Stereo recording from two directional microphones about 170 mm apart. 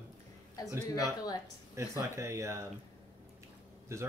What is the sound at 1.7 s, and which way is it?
Speech, 15° right (ahead or behind).